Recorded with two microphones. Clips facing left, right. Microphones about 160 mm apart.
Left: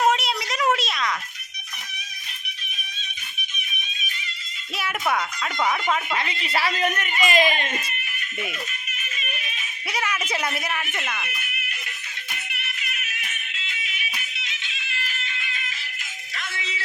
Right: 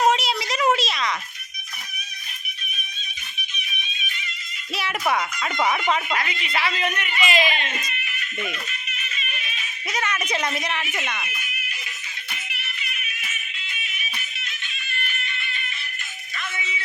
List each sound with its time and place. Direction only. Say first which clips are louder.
0.0 s a sound: right 1 dB; centre (ahead or behind)
4.8 s speech: right 1 dB; centre (ahead or behind)
6.1 s speech: even; 30° left (ahead or behind); by 7.9 s 50° left (ahead or behind)
9.9 s speech: right 1 dB; 10° left (ahead or behind)
11.3 s fire alarm: left 1 dB; 60° left (ahead or behind)
12.3 s music: left 1 dB; 60° left (ahead or behind)